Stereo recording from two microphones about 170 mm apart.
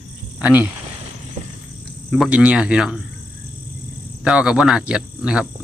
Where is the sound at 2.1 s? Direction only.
5° right (ahead or behind).